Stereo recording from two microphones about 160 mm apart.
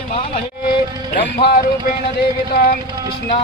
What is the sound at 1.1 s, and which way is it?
Speech, 75° left (ahead or behind).